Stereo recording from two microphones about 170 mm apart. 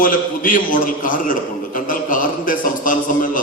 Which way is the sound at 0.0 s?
50° left (ahead or behind).